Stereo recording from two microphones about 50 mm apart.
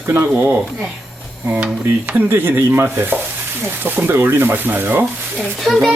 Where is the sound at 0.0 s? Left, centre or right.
Right.